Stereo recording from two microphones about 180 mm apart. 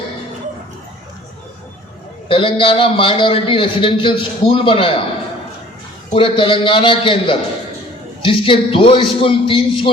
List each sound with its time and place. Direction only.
2.3 s a man's voice: 30° left (ahead or behind)
6.1 s a man's voice: 30° left (ahead or behind)